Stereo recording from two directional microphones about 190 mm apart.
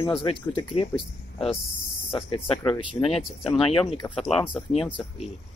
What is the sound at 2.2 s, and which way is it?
Speech, 30° left (ahead or behind).